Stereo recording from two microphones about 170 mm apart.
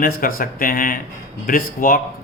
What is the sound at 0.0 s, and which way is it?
A man's voice, 55° left (ahead or behind).